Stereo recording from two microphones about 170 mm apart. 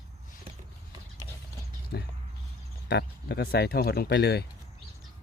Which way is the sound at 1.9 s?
70° left (ahead or behind).